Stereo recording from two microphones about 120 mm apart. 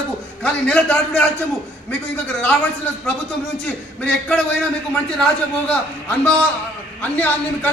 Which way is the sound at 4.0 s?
10° left (ahead or behind).